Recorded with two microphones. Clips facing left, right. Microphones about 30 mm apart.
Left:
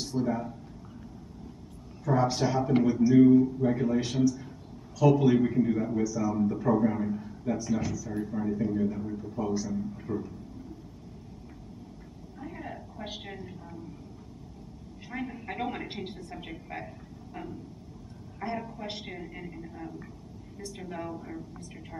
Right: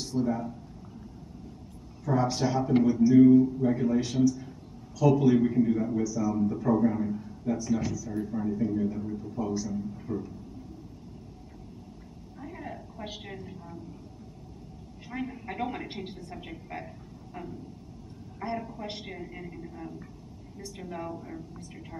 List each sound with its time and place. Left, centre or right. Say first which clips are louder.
0.0 s speech: right 1 dB; centre
2.0 s a man's voice: left 1 dB; centre
7.6 s a woman's voice: right 1 dB; centre
12.4 s a sound: even; centre
15.0 s a woman's voice: even; centre